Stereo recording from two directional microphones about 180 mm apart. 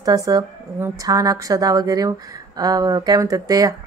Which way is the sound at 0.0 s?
20° right (ahead or behind).